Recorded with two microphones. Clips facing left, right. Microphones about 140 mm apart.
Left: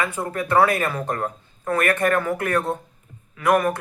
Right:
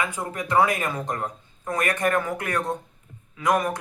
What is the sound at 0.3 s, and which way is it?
Speech, 15° right (ahead or behind).